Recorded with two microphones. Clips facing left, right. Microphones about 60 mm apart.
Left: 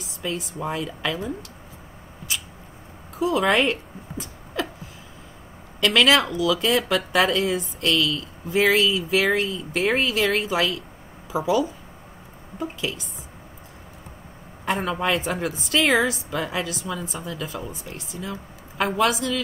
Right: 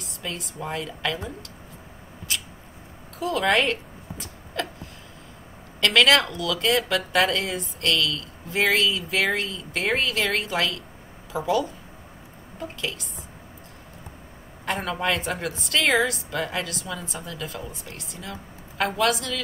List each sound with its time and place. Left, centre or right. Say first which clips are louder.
0.0 s speech: left 5 dB; centre
3.2 s a woman's voice: left 2 dB; centre
4.6 s a sound: left 2 dB; centre
5.8 s a woman's voice: left 1 dB; centre
14.6 s a woman's voice: left 3 dB; centre